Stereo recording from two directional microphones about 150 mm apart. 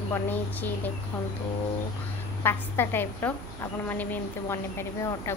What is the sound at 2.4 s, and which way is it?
Speech, 15° left (ahead or behind).